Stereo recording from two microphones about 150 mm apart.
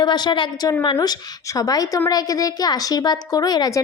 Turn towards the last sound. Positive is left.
turn(degrees=25)  # may be behind; listen again after turning